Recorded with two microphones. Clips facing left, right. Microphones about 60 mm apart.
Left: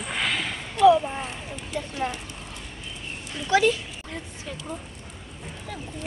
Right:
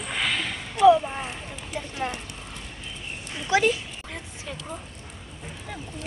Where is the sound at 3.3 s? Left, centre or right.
Centre.